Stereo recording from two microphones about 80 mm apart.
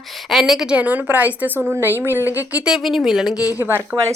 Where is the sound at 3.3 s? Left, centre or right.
Left.